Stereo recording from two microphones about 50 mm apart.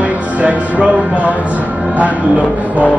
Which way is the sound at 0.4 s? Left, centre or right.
Right.